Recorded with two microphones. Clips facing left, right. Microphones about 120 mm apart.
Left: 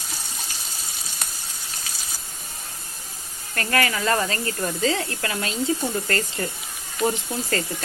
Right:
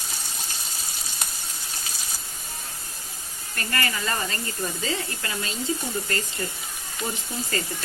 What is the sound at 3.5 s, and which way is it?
Speech, 80° left.